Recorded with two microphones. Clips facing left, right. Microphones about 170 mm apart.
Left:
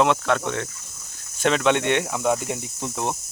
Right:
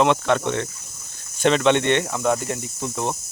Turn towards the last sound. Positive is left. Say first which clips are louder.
# right 1 dB
turn(degrees=15)  # may be behind; listen again after turning